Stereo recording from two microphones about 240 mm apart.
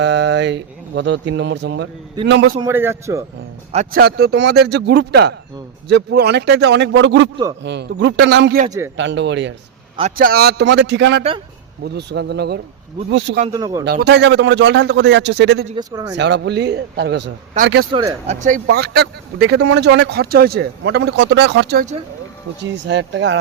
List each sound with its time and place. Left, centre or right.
0.0 s speech: right
2.6 s a man's voice: centre
3.7 s a man's voice: right
10.0 s speech: right
13.5 s a man's voice: centre
13.8 s speech: right
15.7 s a man's voice: centre
16.1 s speech: right
17.9 s speech: right